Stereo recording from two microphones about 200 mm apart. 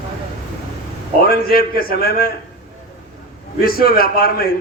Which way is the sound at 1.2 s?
50° left (ahead or behind).